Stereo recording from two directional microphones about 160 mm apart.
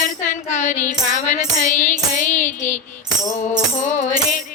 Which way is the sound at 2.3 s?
50° left (ahead or behind).